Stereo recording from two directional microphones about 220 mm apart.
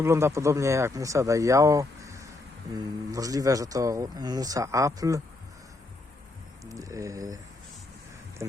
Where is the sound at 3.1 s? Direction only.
15° right (ahead or behind).